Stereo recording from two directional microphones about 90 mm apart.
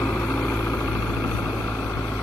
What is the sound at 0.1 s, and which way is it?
Vehicle, 5° left (ahead or behind).